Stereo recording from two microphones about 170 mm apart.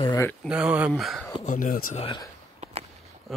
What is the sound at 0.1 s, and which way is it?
Speech, 15° left (ahead or behind).